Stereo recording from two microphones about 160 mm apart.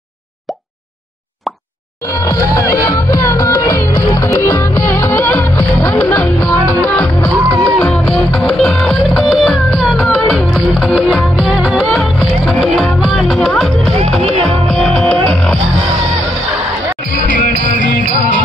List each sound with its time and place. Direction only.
2.1 s music: 20° left (ahead or behind); by 15.5 s 5° left (ahead or behind)
17.1 s music: 55° left (ahead or behind)